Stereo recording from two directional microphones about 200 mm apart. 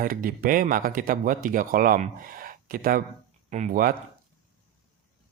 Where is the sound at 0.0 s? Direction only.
45° right (ahead or behind).